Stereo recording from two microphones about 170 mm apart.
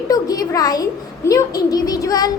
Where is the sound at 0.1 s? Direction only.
20° left (ahead or behind).